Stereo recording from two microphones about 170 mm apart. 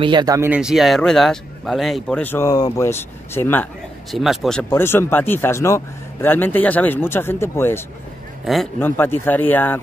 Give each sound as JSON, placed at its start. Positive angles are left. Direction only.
{"t": 0.0, "sound": "speech", "side_deg": -25}
{"t": 0.5, "sound": "speech", "side_deg": -5}
{"t": 4.1, "sound": "speech", "side_deg": 0}
{"t": 4.6, "sound": "speech", "side_deg": 15}
{"t": 8.5, "sound": "speech", "side_deg": 0}
{"t": 8.8, "sound": "speech", "side_deg": 10}